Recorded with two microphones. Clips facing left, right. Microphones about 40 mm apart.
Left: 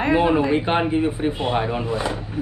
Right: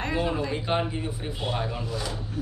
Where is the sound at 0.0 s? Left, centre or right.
Left.